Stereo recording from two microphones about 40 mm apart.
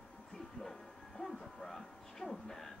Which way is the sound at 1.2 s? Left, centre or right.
Centre.